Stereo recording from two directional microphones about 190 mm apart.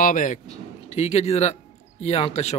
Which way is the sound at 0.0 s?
45° left (ahead or behind).